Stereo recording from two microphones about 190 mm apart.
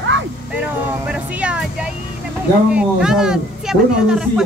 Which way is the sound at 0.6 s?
5° right (ahead or behind).